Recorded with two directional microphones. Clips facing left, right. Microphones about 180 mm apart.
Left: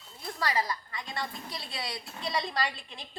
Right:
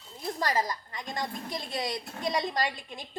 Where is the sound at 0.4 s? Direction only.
45° right (ahead or behind).